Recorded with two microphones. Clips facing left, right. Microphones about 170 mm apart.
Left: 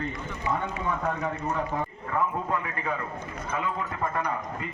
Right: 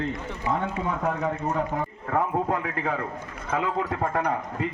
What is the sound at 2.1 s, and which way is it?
Speech, 65° right (ahead or behind).